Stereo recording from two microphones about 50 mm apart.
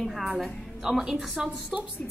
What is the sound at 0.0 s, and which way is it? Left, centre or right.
A woman's voice, centre.